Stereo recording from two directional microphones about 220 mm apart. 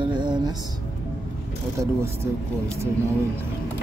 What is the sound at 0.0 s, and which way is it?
Music, 20° right (ahead or behind).